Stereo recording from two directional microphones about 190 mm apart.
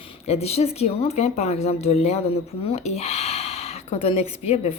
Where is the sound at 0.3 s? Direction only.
35° left (ahead or behind).